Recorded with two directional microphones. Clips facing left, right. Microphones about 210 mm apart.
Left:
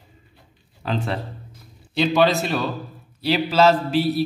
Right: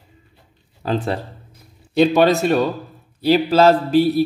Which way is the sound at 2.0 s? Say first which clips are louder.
Right 5 dB; 50° right (ahead or behind).